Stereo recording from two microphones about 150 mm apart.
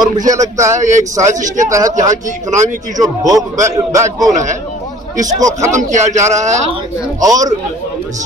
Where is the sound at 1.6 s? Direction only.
20° right (ahead or behind).